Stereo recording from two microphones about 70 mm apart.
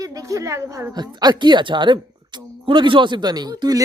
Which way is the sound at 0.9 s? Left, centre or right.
Right.